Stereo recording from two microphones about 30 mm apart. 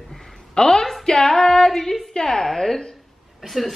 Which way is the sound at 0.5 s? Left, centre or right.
Centre.